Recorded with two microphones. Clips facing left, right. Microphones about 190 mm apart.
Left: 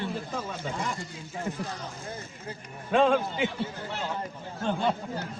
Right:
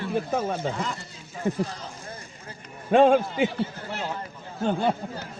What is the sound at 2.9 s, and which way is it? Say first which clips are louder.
Speech: right 5 dB; 50° right (ahead or behind).